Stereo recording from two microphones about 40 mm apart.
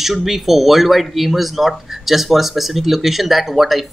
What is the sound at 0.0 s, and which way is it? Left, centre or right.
Speech, centre.